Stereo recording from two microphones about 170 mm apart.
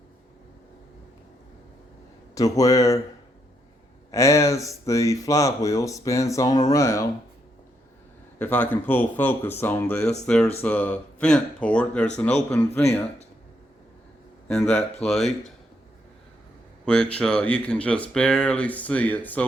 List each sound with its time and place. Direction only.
2.3 s speech: 20° left (ahead or behind)
4.1 s speech: 15° left (ahead or behind)
8.4 s speech: 10° left (ahead or behind)
15.0 s speech: centre (ahead or behind)
16.8 s speech: 5° left (ahead or behind)